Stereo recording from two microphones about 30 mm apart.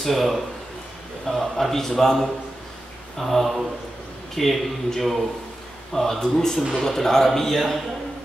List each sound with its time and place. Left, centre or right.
0.0 s a man's voice: centre
7.5 s speech: centre